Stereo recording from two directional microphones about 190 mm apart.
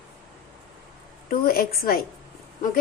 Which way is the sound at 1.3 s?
50° left (ahead or behind).